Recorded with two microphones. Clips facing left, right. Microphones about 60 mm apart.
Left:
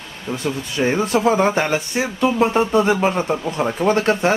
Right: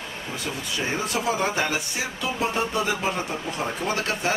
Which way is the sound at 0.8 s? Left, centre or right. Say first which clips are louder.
Left 10 dB; left.